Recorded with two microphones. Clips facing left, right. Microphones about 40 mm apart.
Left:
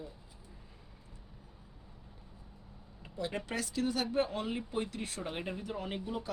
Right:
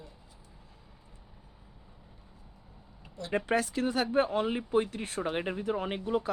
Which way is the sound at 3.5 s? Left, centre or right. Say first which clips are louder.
Right 7 dB; right.